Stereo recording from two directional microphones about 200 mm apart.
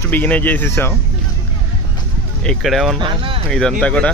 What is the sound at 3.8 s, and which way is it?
Speech, 5° left (ahead or behind).